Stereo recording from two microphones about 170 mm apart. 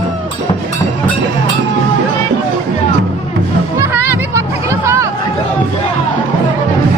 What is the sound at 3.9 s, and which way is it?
Music, 15° right (ahead or behind).